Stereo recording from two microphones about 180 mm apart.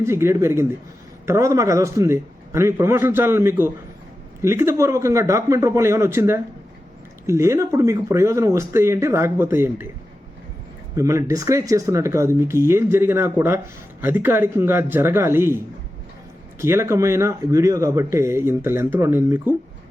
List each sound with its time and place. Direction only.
0.0 s speech: 15° right (ahead or behind)
10.9 s speech: 15° right (ahead or behind)
16.6 s speech: 15° right (ahead or behind)